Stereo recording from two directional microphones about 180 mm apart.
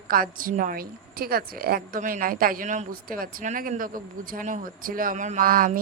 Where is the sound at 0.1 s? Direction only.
50° right (ahead or behind).